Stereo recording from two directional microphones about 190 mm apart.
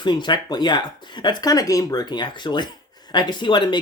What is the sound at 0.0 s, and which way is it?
Speech, 25° left (ahead or behind).